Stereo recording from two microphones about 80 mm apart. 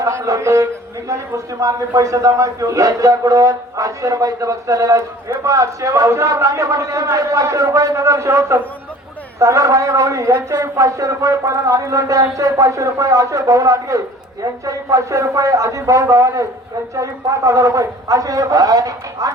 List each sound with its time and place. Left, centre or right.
0.0 s a man's voice: right